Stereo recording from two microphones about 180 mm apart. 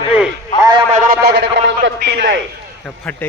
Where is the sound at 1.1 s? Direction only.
65° right (ahead or behind).